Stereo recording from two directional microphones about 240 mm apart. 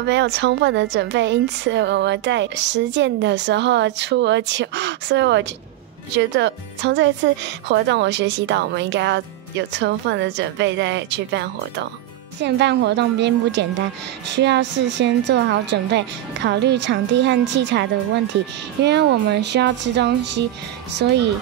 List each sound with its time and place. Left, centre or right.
0.0 s speech: right
18.9 s speech: right